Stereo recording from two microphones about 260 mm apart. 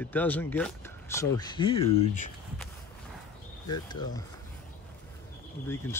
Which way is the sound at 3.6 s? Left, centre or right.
Centre.